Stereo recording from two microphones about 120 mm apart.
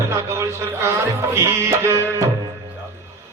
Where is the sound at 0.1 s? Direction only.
25° right (ahead or behind).